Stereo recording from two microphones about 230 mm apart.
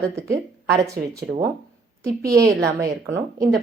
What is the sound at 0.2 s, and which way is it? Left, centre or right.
Speech, centre.